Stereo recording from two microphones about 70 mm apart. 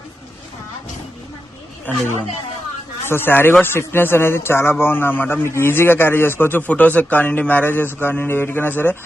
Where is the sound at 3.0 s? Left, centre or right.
Left.